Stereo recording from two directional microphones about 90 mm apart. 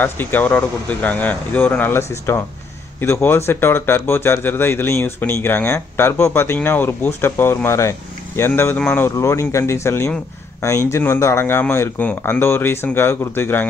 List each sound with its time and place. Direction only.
0.0 s speech: 20° left (ahead or behind)